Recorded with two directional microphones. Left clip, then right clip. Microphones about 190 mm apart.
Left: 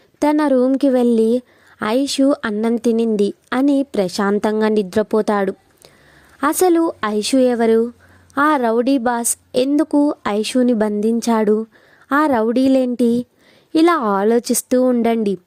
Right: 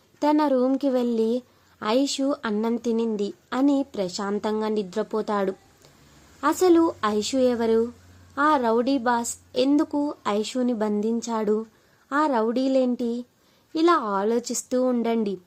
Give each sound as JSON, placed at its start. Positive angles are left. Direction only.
{"t": 0.2, "sound": "a woman's voice", "side_deg": 40}